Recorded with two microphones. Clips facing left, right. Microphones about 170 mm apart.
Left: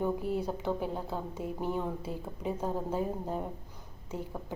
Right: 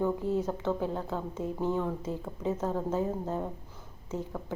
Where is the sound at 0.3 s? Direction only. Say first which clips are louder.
Right 2 dB; 15° left (ahead or behind).